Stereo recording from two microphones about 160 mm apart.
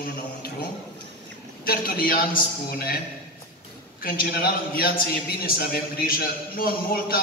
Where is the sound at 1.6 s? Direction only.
70° left (ahead or behind).